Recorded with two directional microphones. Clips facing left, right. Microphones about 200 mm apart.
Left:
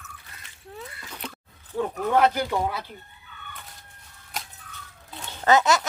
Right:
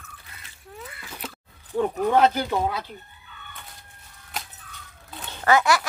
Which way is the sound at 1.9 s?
15° right (ahead or behind).